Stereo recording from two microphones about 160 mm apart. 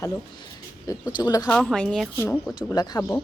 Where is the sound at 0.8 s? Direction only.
25° left (ahead or behind).